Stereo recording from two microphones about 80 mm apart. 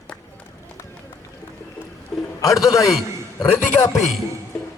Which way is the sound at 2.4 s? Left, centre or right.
Left.